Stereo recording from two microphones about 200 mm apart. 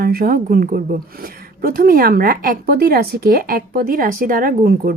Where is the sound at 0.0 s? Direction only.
50° right (ahead or behind).